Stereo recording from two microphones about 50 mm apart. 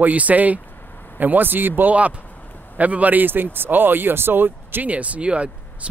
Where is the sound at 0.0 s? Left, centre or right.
Right.